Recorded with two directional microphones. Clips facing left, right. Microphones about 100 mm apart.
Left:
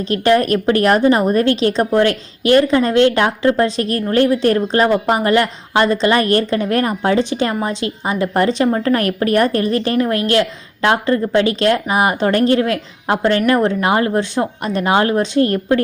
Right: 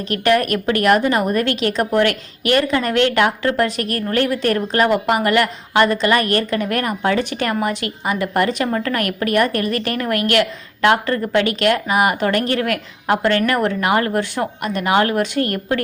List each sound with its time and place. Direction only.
0.1 s a woman's voice: 30° left (ahead or behind)